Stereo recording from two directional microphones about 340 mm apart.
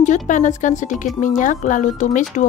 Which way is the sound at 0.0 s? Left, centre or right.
Left.